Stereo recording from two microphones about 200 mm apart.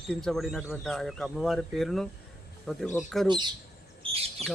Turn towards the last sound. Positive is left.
turn(degrees=0)  # may be behind; listen again after turning